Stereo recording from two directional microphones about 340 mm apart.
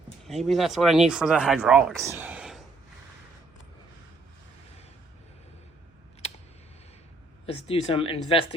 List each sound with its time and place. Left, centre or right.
0.3 s speech: centre
6.2 s typing: centre
7.4 s speech: centre